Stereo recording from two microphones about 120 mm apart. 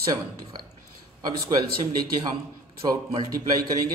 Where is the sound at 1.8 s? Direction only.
35° right (ahead or behind).